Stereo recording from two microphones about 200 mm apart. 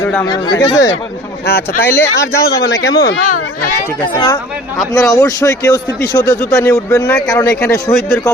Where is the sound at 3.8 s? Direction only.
20° left (ahead or behind).